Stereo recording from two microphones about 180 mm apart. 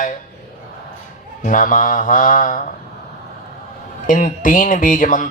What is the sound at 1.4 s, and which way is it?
Music, 45° left (ahead or behind).